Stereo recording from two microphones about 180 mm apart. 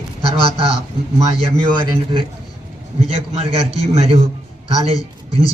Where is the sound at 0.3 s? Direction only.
30° right (ahead or behind).